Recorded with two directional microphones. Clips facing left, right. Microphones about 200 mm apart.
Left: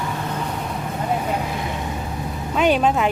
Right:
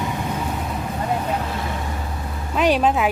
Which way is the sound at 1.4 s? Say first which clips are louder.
Left 1 dB; 15° left (ahead or behind).